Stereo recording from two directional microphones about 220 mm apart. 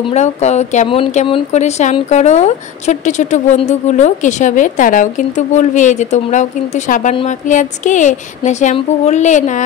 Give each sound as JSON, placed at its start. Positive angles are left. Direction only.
{"t": 0.1, "sound": "speech", "side_deg": 30}